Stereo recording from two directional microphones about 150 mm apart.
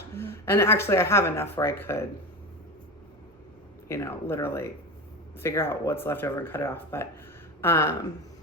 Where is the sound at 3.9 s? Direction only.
15° left (ahead or behind).